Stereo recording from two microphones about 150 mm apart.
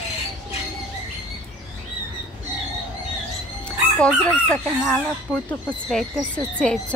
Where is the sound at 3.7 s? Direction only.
10° left (ahead or behind).